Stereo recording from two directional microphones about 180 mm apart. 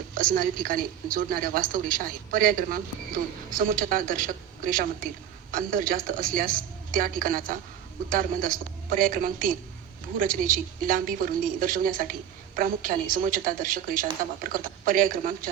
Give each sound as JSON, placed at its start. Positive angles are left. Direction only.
{"t": 0.1, "sound": "a woman's voice", "side_deg": -50}